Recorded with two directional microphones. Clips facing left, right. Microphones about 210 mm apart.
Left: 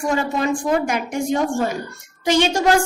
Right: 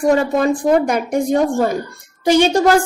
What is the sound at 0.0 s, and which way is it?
A woman's voice, 40° right (ahead or behind).